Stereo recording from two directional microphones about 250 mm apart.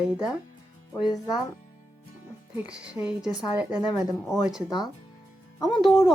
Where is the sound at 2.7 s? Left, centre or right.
Centre.